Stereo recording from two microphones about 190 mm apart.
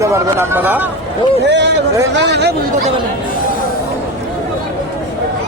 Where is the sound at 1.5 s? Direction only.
65° right (ahead or behind).